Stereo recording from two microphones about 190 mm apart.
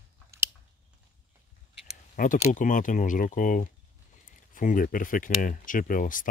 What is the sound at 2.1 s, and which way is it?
Speech, 45° left (ahead or behind).